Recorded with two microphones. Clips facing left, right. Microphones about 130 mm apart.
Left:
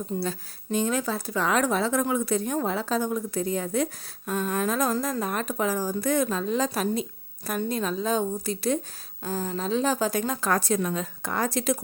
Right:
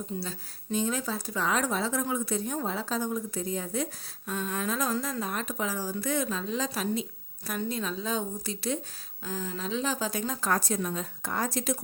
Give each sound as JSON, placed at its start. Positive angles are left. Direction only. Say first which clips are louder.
{"t": 0.2, "sound": "speech", "louder": "left 7 dB", "side_deg": 65}
{"t": 4.3, "sound": "a woman's voice", "louder": "left 5 dB", "side_deg": 55}